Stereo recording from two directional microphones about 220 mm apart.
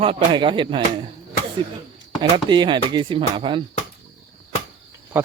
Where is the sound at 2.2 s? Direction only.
20° right (ahead or behind).